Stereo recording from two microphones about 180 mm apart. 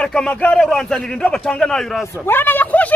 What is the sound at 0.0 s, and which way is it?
A man's voice, 5° left (ahead or behind).